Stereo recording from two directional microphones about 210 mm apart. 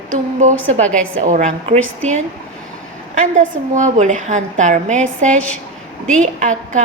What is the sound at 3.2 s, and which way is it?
A woman's voice, 35° right (ahead or behind).